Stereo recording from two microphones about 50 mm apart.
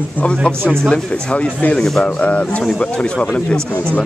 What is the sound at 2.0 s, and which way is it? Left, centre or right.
Speech, left.